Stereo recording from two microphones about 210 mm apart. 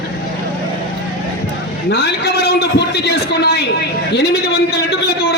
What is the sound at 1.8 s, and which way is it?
A man's voice, 50° left (ahead or behind).